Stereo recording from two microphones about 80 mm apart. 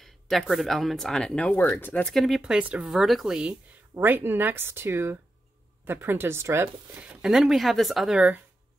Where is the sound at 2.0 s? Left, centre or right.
Centre.